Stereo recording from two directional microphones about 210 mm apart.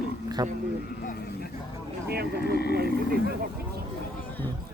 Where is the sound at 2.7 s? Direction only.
50° right (ahead or behind).